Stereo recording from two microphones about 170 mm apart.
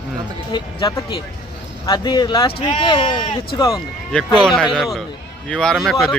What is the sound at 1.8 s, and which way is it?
Speech, 25° left (ahead or behind).